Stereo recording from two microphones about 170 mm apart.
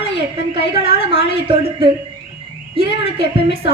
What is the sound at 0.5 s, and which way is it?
A woman's voice, 30° right (ahead or behind).